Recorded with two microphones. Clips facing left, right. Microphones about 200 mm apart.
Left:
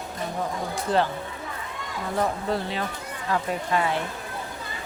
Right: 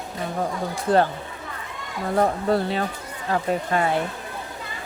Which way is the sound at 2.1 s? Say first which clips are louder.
Right 5 dB; 45° right (ahead or behind).